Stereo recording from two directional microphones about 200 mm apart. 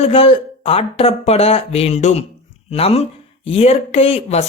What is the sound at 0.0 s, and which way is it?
Speech, 30° left (ahead or behind).